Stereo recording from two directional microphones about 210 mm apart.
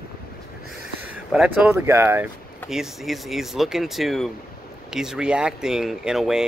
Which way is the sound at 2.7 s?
Centre (ahead or behind).